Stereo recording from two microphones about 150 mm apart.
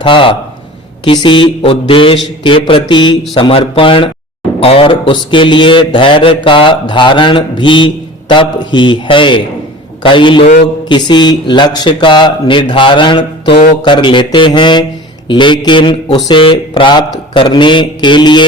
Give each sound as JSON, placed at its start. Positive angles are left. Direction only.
{"t": 0.0, "sound": "speech", "side_deg": 35}